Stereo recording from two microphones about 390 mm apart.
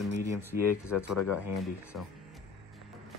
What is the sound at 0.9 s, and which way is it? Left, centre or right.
Speech, left.